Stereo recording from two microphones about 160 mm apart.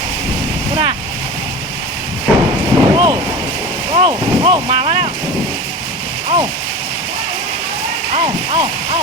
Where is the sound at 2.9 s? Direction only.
30° right (ahead or behind).